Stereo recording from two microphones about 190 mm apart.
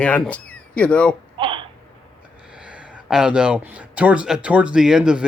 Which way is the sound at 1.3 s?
25° right (ahead or behind).